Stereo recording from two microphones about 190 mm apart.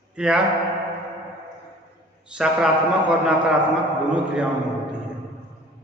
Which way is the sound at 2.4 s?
5° right (ahead or behind).